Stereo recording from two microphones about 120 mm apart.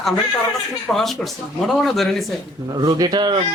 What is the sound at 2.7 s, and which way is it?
Speech, 35° right (ahead or behind).